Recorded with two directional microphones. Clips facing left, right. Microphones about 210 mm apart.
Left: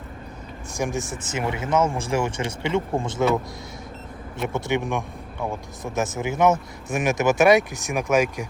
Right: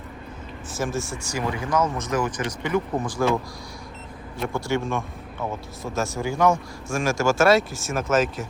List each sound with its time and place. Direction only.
0.8 s speech: 15° left (ahead or behind)
4.5 s speech: 20° left (ahead or behind)